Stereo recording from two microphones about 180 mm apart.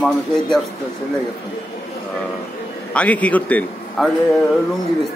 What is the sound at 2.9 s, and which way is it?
A man's voice, 10° left (ahead or behind).